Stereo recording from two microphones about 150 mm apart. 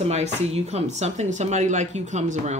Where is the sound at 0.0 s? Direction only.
45° right (ahead or behind).